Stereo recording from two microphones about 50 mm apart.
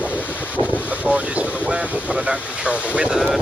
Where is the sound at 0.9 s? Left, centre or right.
Right.